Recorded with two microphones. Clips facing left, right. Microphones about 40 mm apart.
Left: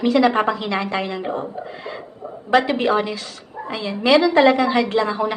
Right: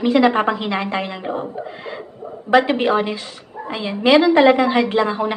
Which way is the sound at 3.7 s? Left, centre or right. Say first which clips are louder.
Right 2 dB; centre.